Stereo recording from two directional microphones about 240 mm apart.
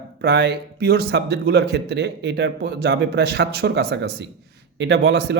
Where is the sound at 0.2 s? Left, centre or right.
Right.